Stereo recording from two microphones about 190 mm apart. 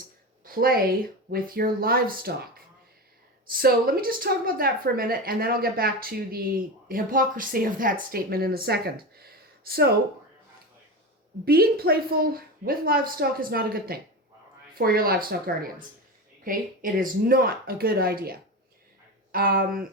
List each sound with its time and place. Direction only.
0.4 s a woman's voice: 50° right (ahead or behind)
3.5 s a woman's voice: 50° right (ahead or behind)
11.4 s a woman's voice: 55° right (ahead or behind)